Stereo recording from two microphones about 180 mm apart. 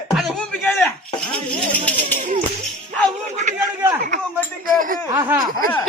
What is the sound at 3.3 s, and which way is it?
Speech, 40° right (ahead or behind).